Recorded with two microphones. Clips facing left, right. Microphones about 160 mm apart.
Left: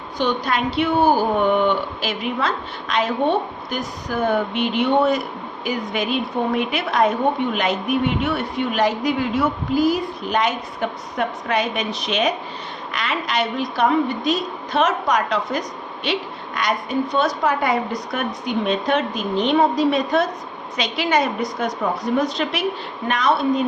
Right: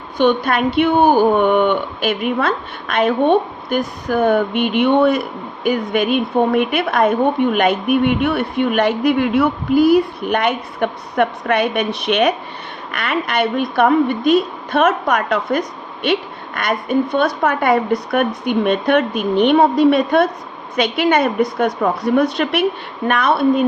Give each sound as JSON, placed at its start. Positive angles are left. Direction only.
{"t": 0.2, "sound": "a woman's voice", "side_deg": -55}